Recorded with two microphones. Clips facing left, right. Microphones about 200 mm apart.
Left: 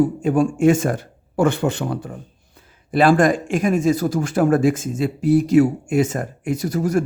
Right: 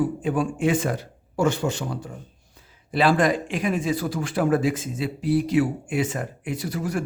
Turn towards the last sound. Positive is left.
turn(degrees=45)  # may be behind; listen again after turning